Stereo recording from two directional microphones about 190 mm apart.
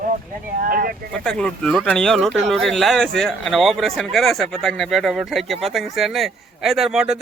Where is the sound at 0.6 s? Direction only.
50° right (ahead or behind).